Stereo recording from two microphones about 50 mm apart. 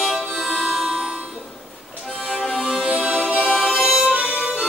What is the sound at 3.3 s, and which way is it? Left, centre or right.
Music, centre.